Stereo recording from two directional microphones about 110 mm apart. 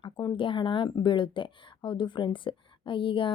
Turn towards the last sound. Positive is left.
turn(degrees=50)  # may be behind; listen again after turning